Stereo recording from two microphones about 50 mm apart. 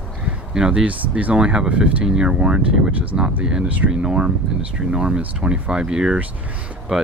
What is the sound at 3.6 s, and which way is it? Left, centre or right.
Speech, right.